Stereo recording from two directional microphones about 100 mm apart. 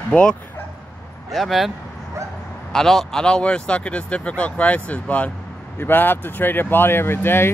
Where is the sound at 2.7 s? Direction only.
5° left (ahead or behind); by 7.5 s 20° left (ahead or behind).